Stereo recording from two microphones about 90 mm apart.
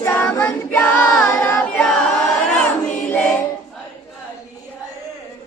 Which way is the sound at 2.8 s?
15° left (ahead or behind).